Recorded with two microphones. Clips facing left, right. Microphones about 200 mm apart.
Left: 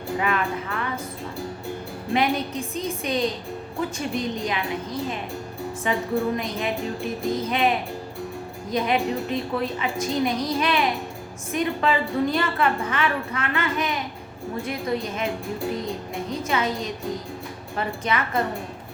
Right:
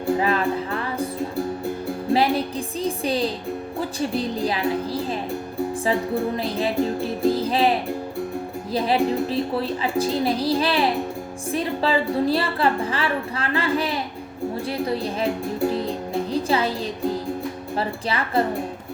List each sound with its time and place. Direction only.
0.2 s music: 30° right (ahead or behind)
2.1 s a woman's voice: 30° right (ahead or behind)